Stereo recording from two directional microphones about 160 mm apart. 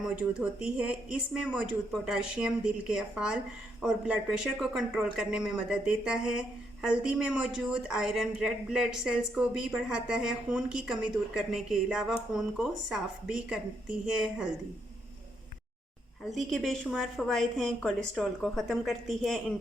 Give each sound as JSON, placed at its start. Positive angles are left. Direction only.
{"t": 0.0, "sound": "speech", "side_deg": -5}
{"t": 16.3, "sound": "speech", "side_deg": 0}